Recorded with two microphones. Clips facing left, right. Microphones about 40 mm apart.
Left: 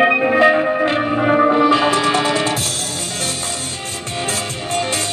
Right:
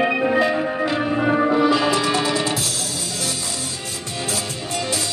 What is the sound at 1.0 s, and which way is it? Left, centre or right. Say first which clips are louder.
Music: left 3 dB; left.